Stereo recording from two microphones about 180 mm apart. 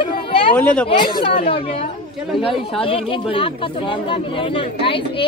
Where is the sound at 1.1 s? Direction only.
30° left (ahead or behind).